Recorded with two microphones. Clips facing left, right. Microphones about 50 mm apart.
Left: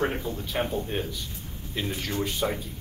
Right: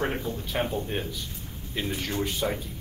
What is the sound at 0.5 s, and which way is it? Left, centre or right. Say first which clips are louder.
A man's voice: even; centre.